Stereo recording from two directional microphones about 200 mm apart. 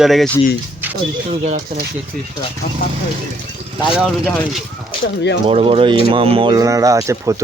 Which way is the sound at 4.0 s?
5° left (ahead or behind).